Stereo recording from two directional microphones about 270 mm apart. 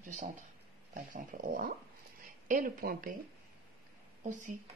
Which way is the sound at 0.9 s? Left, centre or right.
Right.